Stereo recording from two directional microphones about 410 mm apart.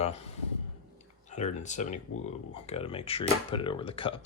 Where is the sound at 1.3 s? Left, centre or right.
Centre.